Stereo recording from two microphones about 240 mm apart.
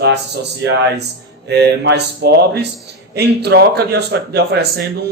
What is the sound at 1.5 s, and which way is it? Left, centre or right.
Speech, right.